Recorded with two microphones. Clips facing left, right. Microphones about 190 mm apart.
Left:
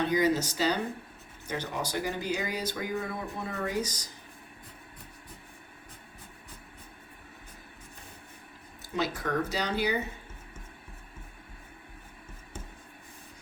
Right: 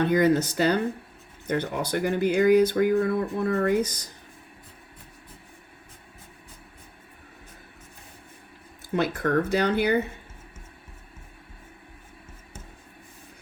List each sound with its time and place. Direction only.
0.0 s speech: 55° right (ahead or behind)
8.9 s speech: 55° right (ahead or behind)